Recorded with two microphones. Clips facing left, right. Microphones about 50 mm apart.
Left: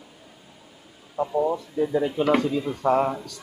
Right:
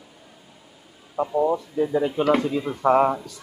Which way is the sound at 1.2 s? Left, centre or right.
Centre.